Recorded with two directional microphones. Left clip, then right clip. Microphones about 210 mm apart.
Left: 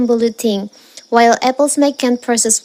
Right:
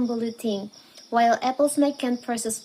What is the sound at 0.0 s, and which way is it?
Speech, 40° left (ahead or behind).